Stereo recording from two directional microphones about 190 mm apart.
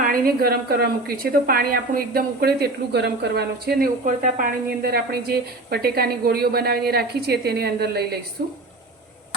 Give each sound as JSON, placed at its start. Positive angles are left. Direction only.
{"t": 0.0, "sound": "a woman's voice", "side_deg": -50}